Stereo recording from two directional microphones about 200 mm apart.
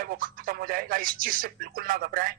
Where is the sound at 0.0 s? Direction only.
45° right (ahead or behind).